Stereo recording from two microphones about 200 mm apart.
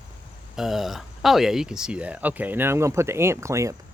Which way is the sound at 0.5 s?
Centre (ahead or behind).